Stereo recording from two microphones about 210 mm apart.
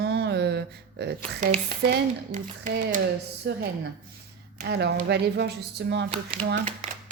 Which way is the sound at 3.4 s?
55° right (ahead or behind).